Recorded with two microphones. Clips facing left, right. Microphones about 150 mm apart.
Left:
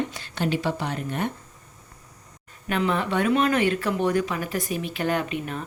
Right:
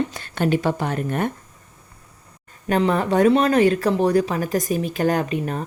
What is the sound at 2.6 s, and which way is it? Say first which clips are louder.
Speech: right 5 dB; 40° right (ahead or behind).